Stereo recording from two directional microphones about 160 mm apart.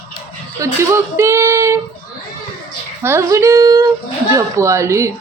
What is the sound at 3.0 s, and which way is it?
Speech, 15° right (ahead or behind).